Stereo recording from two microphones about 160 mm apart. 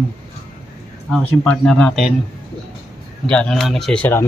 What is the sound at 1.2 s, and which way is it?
Speech, 10° left (ahead or behind).